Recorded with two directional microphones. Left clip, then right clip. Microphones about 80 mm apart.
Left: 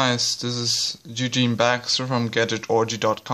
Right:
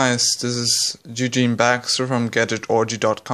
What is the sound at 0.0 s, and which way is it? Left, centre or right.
A man's voice, right.